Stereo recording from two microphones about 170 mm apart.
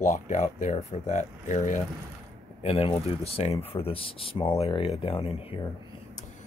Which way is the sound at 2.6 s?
35° left (ahead or behind).